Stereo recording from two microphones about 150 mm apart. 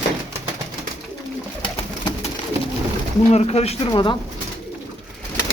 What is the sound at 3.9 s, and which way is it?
Speech, 30° left (ahead or behind).